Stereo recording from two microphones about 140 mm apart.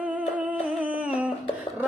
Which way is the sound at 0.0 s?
10° right (ahead or behind).